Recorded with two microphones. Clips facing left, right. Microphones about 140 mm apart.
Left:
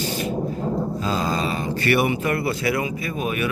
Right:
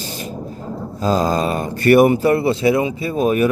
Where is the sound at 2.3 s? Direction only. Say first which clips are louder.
Right 7 dB; 25° right (ahead or behind).